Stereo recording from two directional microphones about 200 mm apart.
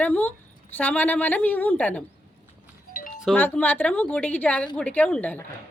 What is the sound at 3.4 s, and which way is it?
A woman's voice, 10° left (ahead or behind).